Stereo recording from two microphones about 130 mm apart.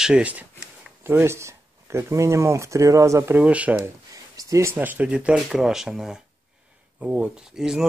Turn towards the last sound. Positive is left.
turn(degrees=-5)  # may be behind; listen again after turning